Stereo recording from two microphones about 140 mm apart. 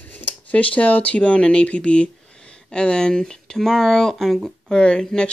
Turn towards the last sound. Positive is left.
turn(degrees=5)  # may be behind; listen again after turning